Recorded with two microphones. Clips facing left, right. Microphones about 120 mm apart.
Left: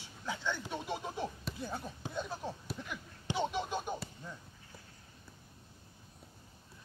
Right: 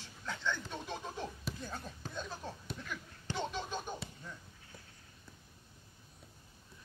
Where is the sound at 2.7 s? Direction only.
15° left (ahead or behind).